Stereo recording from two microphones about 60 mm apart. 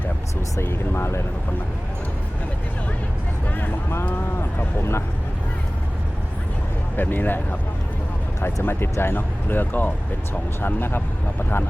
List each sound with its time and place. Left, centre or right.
0.6 s speech: left
3.6 s speech: left
6.9 s speech: left
8.6 s speech: left